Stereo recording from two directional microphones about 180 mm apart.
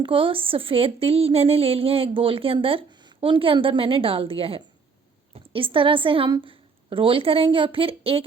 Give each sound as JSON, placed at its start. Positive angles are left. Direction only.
{"t": 0.0, "sound": "speech", "side_deg": -30}